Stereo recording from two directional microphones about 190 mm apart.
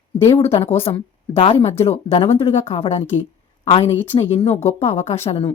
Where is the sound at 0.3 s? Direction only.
30° left (ahead or behind).